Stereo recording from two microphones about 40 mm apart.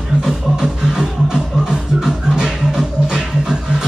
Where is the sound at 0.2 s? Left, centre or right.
Centre.